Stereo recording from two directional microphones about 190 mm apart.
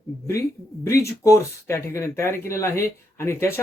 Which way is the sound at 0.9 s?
15° left (ahead or behind).